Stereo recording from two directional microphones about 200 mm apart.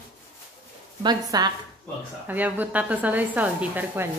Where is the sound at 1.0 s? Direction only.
20° right (ahead or behind).